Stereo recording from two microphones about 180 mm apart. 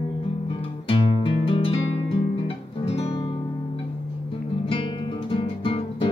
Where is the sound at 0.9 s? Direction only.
30° left (ahead or behind).